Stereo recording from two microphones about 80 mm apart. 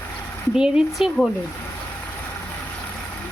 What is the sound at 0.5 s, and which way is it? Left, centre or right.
Speech, centre.